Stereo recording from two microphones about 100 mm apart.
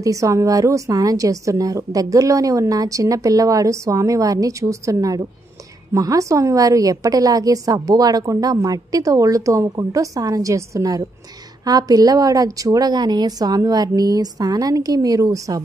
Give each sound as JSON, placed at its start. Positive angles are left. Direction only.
{"t": 0.0, "sound": "a woman's voice", "side_deg": -35}